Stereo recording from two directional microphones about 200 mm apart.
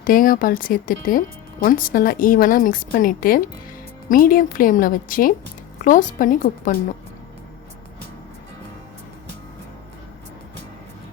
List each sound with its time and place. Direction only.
0.0 s a woman's voice: 45° left (ahead or behind)